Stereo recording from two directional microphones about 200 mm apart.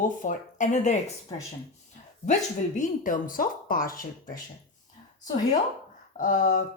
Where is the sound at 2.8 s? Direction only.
40° left (ahead or behind).